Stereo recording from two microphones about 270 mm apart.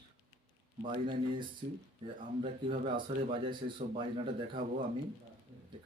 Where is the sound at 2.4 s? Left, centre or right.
Centre.